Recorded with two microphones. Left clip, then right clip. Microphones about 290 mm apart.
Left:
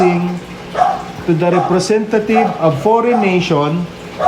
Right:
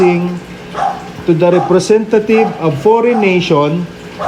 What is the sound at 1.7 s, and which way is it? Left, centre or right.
Speech, centre.